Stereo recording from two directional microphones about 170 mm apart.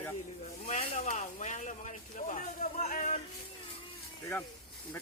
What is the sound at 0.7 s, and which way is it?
Speech, 40° left (ahead or behind).